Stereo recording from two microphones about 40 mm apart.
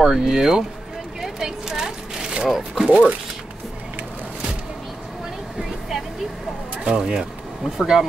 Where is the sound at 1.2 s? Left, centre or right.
Centre.